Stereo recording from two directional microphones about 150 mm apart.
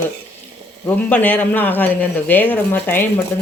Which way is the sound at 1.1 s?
10° left (ahead or behind).